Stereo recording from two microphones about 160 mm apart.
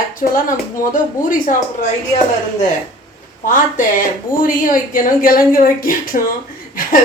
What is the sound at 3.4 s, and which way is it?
Speech, 55° left (ahead or behind).